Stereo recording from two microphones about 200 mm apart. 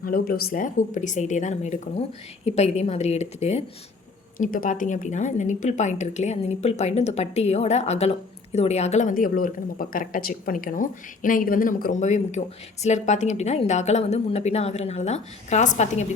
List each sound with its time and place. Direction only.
0.0 s a woman's voice: 50° left (ahead or behind)